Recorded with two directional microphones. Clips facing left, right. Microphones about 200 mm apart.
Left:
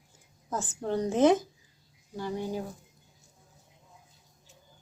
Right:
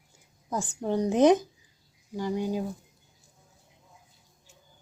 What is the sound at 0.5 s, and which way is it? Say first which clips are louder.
A woman's voice: right 2 dB; 15° right (ahead or behind).